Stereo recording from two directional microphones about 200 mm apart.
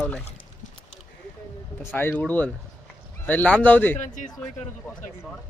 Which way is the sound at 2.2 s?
5° left (ahead or behind).